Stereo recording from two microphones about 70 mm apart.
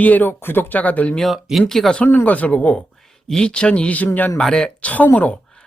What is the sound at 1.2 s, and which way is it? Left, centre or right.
Speech, centre.